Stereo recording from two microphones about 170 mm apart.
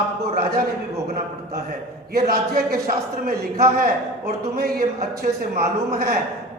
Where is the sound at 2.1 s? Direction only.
60° right (ahead or behind).